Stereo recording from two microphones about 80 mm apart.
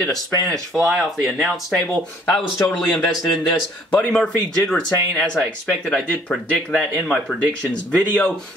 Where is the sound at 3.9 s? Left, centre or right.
Centre.